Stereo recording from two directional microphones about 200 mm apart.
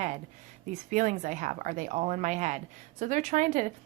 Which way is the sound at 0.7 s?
40° right (ahead or behind).